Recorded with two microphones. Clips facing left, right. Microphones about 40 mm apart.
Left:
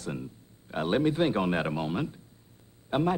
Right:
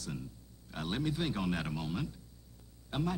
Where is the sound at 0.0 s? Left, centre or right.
Left.